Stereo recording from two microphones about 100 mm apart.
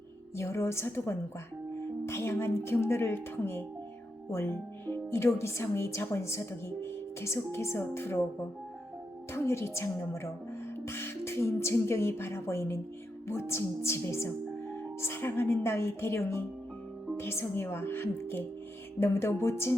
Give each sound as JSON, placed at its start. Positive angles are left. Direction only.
{"t": 0.3, "sound": "speech", "side_deg": 25}
{"t": 9.3, "sound": "speech", "side_deg": 25}